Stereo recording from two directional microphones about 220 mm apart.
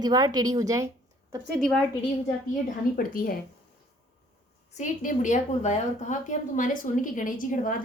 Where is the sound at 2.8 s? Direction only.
40° left (ahead or behind).